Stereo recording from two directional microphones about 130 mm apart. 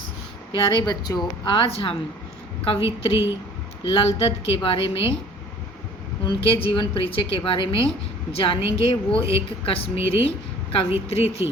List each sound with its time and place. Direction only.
0.5 s a woman's voice: 35° left (ahead or behind)
6.2 s a woman's voice: 45° left (ahead or behind)